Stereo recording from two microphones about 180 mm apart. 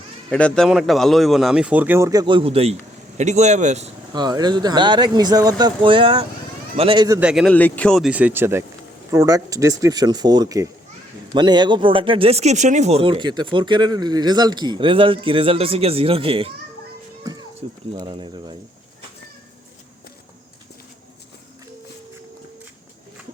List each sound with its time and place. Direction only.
0.3 s speech: 5° left (ahead or behind); by 3.9 s 40° right (ahead or behind)
4.1 s speech: 25° right (ahead or behind)
7.2 s speech: 5° right (ahead or behind)
7.5 s speech: 10° left (ahead or behind); by 16.5 s 30° right (ahead or behind)
17.9 s speech: 25° right (ahead or behind)